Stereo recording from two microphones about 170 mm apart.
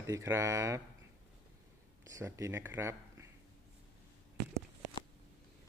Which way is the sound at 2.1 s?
15° right (ahead or behind).